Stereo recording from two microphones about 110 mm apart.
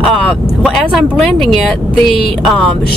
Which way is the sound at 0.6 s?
Centre (ahead or behind).